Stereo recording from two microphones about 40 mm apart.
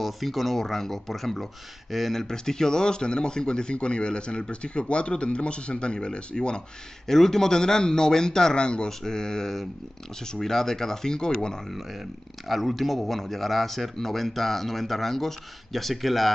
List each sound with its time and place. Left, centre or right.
0.0 s speech: centre
2.1 s speech: centre
7.1 s a man's voice: centre
12.4 s speech: centre